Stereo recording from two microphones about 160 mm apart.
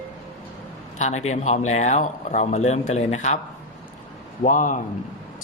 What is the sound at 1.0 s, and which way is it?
Speech, 45° left (ahead or behind).